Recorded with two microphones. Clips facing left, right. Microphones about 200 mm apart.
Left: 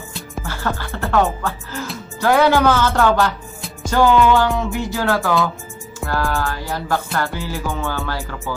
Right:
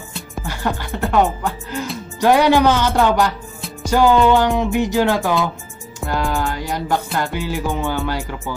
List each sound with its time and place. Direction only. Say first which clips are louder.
0.4 s speech: right 1 dB; 15° right (ahead or behind)
2.1 s music: right 1 dB; 15° right (ahead or behind)